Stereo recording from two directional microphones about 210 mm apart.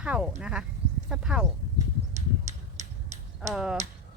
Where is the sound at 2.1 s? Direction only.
35° right (ahead or behind).